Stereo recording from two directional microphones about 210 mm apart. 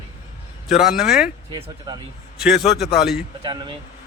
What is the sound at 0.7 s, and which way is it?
Speech, centre (ahead or behind).